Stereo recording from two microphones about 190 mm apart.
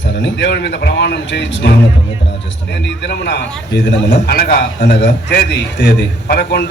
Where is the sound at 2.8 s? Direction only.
65° left (ahead or behind).